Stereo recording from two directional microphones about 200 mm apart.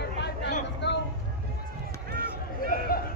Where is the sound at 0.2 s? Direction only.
60° left (ahead or behind).